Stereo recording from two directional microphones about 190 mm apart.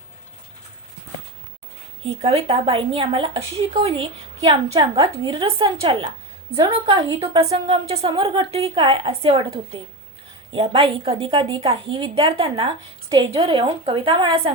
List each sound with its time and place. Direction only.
2.0 s a woman's voice: 30° right (ahead or behind)